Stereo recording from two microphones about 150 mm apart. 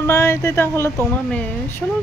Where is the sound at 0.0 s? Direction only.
20° left (ahead or behind).